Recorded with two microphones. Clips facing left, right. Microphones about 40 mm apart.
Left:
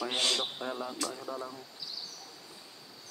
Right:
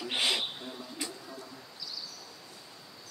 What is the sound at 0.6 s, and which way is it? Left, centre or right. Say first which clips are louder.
Speech: left 6 dB; left.